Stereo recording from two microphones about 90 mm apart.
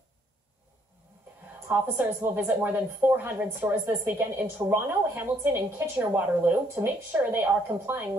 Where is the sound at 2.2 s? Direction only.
25° right (ahead or behind).